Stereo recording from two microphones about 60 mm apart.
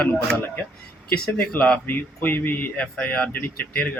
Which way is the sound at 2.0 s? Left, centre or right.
Left.